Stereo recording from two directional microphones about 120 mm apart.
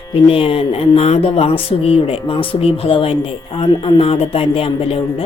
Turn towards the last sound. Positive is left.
turn(degrees=55)  # may be behind; listen again after turning